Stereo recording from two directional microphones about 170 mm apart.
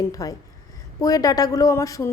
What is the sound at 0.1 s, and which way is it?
A woman's voice, 20° left (ahead or behind).